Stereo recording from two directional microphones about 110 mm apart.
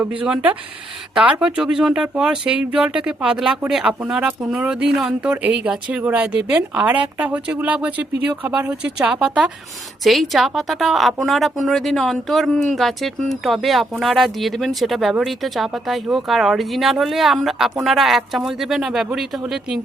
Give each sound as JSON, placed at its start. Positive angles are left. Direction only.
{"t": 1.1, "sound": "a woman's voice", "side_deg": -10}